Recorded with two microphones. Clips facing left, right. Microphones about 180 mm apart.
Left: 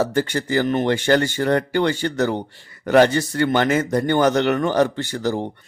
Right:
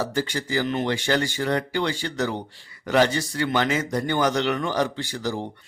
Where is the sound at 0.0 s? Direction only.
55° left (ahead or behind).